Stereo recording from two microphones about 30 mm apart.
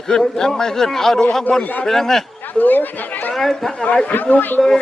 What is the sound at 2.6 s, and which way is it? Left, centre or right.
Speech, left.